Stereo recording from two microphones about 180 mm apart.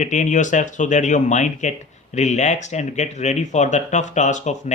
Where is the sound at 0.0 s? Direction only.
45° left (ahead or behind).